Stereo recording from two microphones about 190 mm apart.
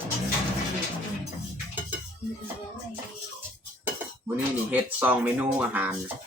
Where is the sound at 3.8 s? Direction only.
10° right (ahead or behind).